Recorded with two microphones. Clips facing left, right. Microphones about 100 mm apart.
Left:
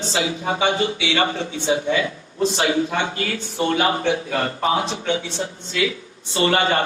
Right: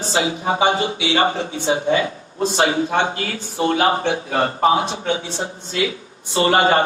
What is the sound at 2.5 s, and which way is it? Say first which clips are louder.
A man's voice: right 6 dB; 35° right (ahead or behind).